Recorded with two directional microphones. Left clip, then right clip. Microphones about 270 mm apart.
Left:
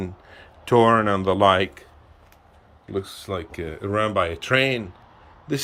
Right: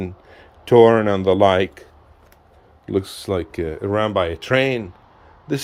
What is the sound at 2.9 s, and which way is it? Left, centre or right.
Speech, right.